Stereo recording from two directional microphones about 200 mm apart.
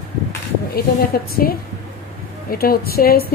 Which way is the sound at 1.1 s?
50° left (ahead or behind).